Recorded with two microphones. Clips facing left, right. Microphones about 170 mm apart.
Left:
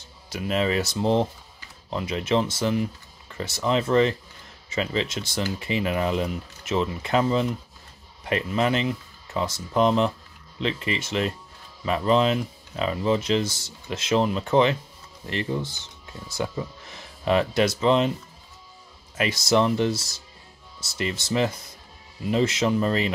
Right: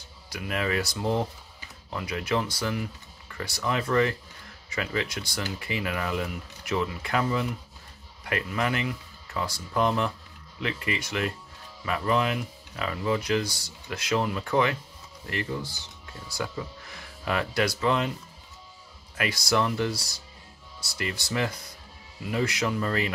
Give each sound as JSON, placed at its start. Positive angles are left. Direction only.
{"t": 0.3, "sound": "speech", "side_deg": 25}
{"t": 19.1, "sound": "speech", "side_deg": 20}